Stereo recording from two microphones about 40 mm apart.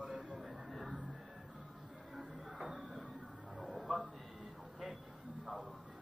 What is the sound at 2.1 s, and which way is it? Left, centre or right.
Music, centre.